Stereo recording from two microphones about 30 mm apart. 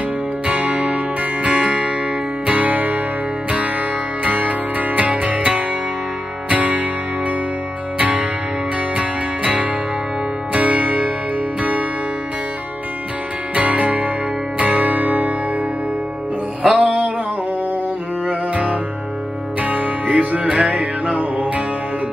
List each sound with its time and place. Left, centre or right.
0.5 s music: right
4.2 s music: right
8.9 s music: right
10.5 s music: right
13.6 s music: right
16.6 s music: right
18.5 s music: right